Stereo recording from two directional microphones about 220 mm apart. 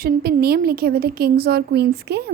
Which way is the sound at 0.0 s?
45° right (ahead or behind).